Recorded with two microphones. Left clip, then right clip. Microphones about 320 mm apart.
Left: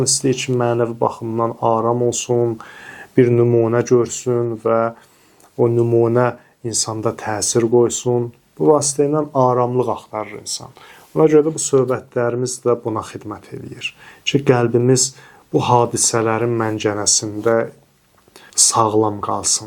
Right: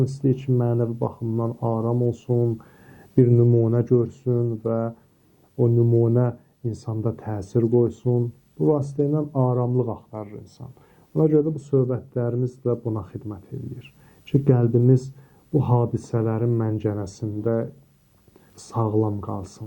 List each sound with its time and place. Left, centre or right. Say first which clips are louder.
0.0 s speech: left 7 dB; centre
8.0 s speech: left 6 dB; centre
8.8 s speech: left 7 dB; centre
18.9 s speech: left 8 dB; centre